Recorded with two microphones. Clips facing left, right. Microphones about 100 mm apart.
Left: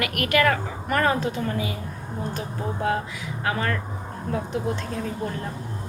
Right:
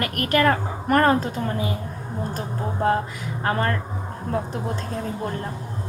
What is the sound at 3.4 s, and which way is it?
Speech, 40° right (ahead or behind).